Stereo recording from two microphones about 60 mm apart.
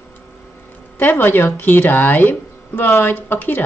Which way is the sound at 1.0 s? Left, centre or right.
Left.